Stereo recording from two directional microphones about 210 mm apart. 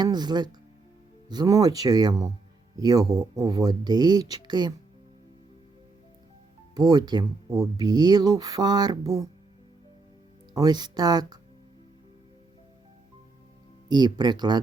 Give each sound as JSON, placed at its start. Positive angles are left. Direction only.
{"t": 0.0, "sound": "speech", "side_deg": -20}
{"t": 6.7, "sound": "speech", "side_deg": -20}
{"t": 10.5, "sound": "speech", "side_deg": -20}
{"t": 13.8, "sound": "speech", "side_deg": -20}